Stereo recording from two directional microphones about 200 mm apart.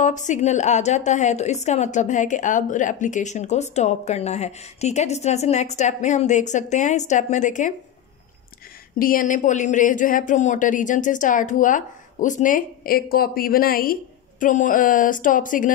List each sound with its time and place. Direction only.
0.0 s a woman's voice: 35° left (ahead or behind)
8.9 s a woman's voice: 45° left (ahead or behind)